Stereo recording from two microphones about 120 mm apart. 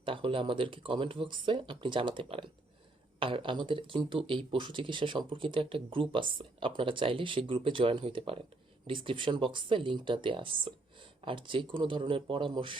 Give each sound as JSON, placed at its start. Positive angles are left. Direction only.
{"t": 0.0, "sound": "speech", "side_deg": -45}